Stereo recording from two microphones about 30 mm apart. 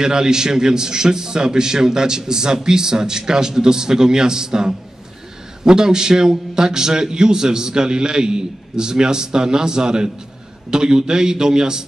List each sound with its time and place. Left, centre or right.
0.0 s a man's voice: right